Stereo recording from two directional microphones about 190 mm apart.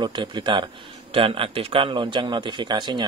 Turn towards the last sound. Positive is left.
turn(degrees=-25)  # may be behind; listen again after turning